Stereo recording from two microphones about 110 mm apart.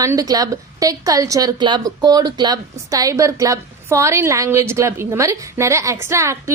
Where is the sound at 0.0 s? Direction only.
30° right (ahead or behind).